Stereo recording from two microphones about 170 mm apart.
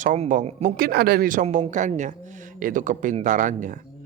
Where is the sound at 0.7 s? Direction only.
65° right (ahead or behind).